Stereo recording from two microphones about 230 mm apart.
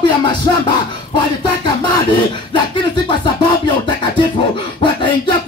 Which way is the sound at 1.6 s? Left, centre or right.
Centre.